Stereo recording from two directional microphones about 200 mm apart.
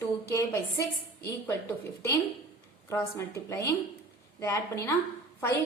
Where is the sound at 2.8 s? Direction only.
15° left (ahead or behind).